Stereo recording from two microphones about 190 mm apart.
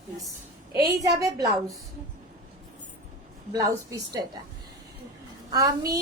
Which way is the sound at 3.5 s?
20° right (ahead or behind).